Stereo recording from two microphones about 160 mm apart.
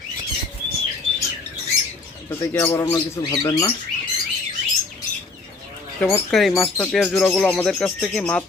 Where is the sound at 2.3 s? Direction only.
15° left (ahead or behind).